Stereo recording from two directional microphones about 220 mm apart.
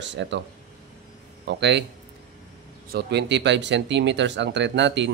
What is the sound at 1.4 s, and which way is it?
Speech, 50° right (ahead or behind).